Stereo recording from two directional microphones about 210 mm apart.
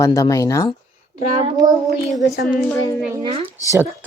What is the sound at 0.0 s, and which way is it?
Speech, 15° left (ahead or behind).